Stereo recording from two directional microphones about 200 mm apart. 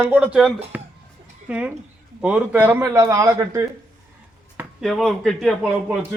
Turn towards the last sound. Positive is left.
turn(degrees=-5)  # may be behind; listen again after turning